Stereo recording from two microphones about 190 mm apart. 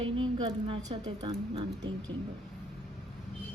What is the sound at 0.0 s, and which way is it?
A woman's voice, 25° right (ahead or behind).